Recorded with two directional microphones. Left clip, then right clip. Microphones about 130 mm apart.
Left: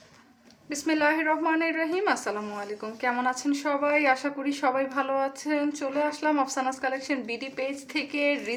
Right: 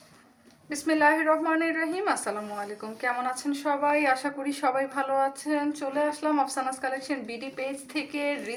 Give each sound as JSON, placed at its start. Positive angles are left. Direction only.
{"t": 0.7, "sound": "speech", "side_deg": 45}
{"t": 5.5, "sound": "a woman's voice", "side_deg": 45}